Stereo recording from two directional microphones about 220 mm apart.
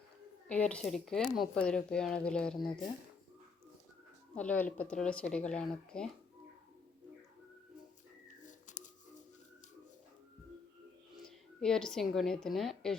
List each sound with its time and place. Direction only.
0.4 s speech: 5° left (ahead or behind)
4.4 s speech: 5° left (ahead or behind)
8.4 s a sound: 35° left (ahead or behind)
11.2 s a woman's voice: 5° left (ahead or behind)